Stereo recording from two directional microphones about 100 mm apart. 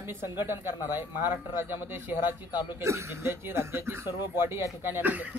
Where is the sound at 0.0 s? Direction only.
25° right (ahead or behind).